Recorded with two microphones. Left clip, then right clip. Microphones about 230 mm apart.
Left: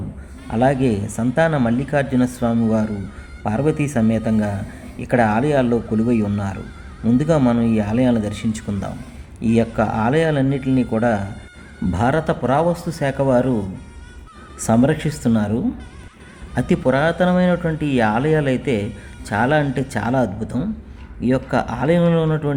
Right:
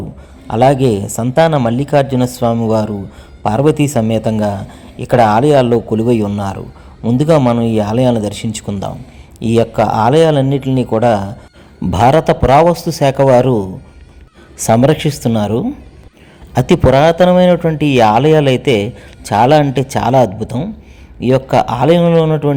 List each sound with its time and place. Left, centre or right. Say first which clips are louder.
0.4 s a man's voice: right 7 dB; centre